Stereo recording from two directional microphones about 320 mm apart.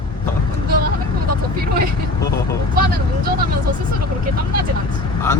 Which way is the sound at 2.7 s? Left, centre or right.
Right.